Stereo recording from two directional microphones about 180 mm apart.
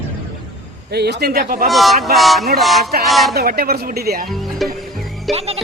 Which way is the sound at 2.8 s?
60° right (ahead or behind).